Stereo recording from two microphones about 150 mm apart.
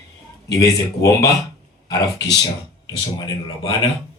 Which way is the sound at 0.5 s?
25° left (ahead or behind).